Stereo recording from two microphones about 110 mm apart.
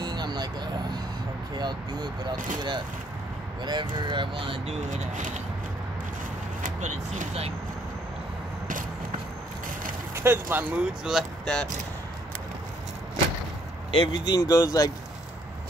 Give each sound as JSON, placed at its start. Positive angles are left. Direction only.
{"t": 0.0, "sound": "vehicle", "side_deg": -40}
{"t": 1.6, "sound": "speech", "side_deg": -40}
{"t": 6.8, "sound": "speech", "side_deg": -80}
{"t": 10.1, "sound": "speech", "side_deg": -20}
{"t": 10.8, "sound": "speech", "side_deg": -5}
{"t": 13.9, "sound": "speech", "side_deg": 50}